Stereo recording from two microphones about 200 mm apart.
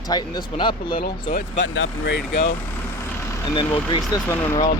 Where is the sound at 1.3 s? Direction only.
65° left (ahead or behind).